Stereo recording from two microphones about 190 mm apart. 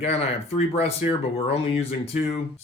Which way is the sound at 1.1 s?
30° left (ahead or behind).